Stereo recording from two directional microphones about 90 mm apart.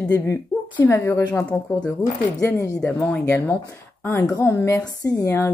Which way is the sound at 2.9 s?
15° left (ahead or behind).